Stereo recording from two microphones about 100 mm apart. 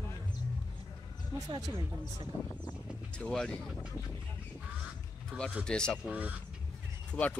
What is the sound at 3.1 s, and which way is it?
Speech, 10° left (ahead or behind).